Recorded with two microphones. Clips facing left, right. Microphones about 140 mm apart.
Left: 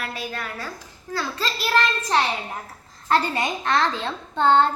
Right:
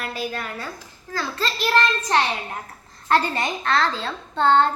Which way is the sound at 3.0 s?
10° left (ahead or behind).